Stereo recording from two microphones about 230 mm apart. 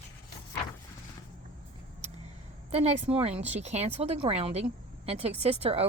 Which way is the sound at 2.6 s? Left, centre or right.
Right.